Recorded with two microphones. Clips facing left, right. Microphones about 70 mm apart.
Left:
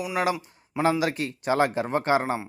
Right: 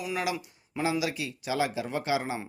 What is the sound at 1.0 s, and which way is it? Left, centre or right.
Speech, left.